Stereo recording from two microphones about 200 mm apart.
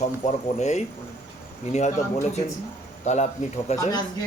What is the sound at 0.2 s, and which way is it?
A man's voice, 35° left (ahead or behind).